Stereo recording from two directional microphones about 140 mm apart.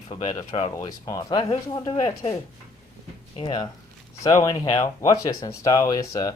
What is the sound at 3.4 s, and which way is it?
Speech, 35° left (ahead or behind).